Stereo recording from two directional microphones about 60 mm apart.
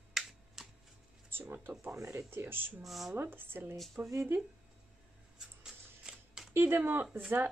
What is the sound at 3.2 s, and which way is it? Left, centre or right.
Speech, right.